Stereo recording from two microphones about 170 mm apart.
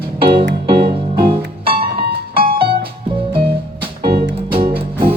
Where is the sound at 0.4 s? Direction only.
65° right (ahead or behind).